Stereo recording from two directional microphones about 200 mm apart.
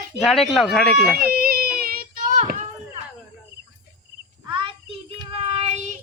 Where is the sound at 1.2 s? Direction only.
50° right (ahead or behind).